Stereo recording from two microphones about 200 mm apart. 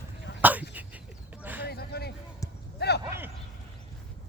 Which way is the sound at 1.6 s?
50° left (ahead or behind).